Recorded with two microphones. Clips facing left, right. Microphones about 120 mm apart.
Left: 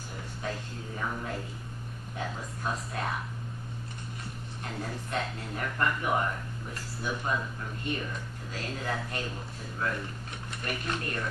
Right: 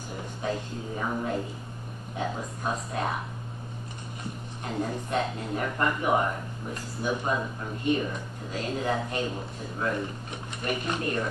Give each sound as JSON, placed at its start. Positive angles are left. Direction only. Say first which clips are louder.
{"t": 0.4, "sound": "speech", "louder": "right 6 dB", "side_deg": -15}
{"t": 4.6, "sound": "speech", "louder": "right 7 dB", "side_deg": -15}